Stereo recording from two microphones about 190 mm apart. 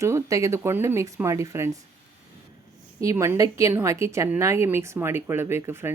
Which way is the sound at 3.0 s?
15° right (ahead or behind).